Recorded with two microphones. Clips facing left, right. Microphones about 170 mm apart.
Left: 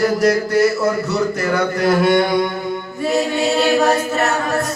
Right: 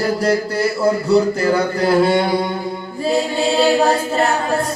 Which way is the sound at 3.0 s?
30° right (ahead or behind).